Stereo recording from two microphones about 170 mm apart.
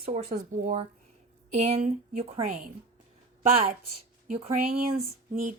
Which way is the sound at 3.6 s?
40° right (ahead or behind).